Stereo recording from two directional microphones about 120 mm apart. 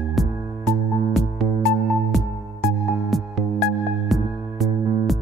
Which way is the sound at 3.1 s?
Centre (ahead or behind).